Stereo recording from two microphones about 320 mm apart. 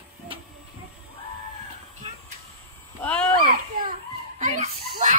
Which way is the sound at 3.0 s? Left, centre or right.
Centre.